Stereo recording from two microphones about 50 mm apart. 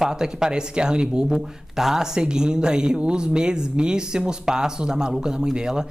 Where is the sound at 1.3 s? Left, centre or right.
Centre.